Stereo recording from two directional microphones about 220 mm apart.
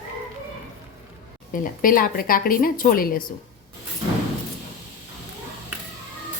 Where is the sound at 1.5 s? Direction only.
40° left (ahead or behind).